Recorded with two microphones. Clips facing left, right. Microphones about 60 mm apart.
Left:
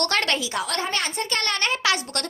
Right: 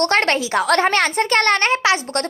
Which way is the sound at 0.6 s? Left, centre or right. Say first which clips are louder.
Right 10 dB; right.